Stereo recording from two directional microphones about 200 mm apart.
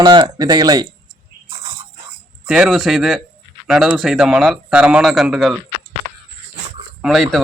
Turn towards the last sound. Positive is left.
turn(degrees=0)  # may be behind; listen again after turning